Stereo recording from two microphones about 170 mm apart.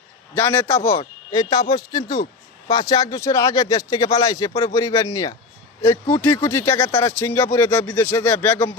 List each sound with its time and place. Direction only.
0.3 s speech: 15° left (ahead or behind)